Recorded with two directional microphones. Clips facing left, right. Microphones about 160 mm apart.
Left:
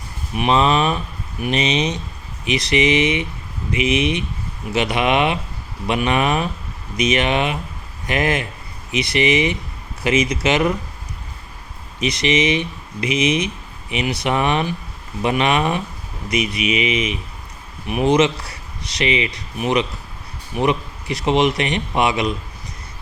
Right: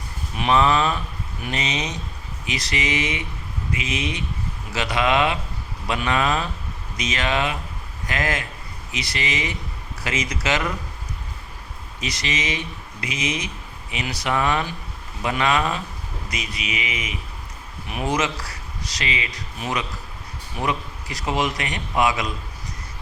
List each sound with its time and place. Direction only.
0.3 s a man's voice: 20° left (ahead or behind)
11.9 s a man's voice: 20° left (ahead or behind)